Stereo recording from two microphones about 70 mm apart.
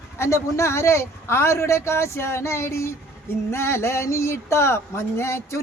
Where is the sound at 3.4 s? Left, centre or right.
Left.